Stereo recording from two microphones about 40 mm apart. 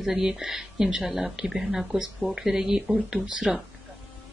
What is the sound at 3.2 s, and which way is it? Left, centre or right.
Speech, right.